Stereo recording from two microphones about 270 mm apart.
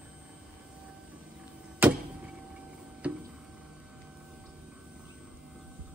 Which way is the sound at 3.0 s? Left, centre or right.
Centre.